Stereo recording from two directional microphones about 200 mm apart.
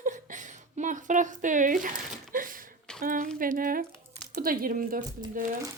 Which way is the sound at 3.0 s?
45° right (ahead or behind).